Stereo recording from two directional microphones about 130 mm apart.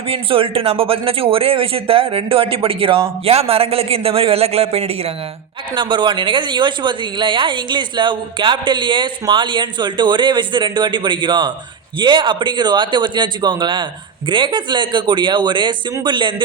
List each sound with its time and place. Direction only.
0.1 s speech: 45° right (ahead or behind)
5.7 s a woman's voice: 40° right (ahead or behind)